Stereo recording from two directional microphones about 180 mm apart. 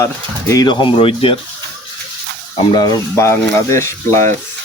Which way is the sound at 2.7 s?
25° left (ahead or behind).